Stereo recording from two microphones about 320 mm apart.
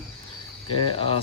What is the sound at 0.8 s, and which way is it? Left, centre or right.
Speech, centre.